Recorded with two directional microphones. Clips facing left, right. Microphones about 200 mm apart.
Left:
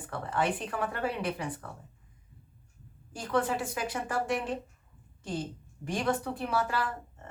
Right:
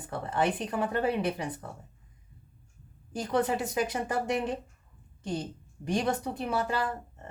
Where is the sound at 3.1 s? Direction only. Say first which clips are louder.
Right 2 dB; 20° right (ahead or behind).